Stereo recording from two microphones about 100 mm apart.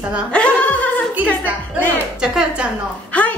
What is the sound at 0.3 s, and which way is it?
Laughter, 15° left (ahead or behind).